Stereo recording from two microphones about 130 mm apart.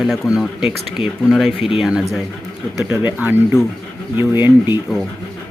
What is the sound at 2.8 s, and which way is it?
Speech, 15° right (ahead or behind).